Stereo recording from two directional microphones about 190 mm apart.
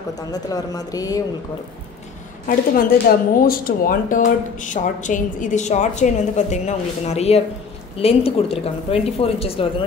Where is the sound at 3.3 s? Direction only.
50° left (ahead or behind).